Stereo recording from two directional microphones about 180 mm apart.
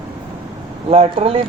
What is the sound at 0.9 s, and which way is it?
Speech, 35° right (ahead or behind).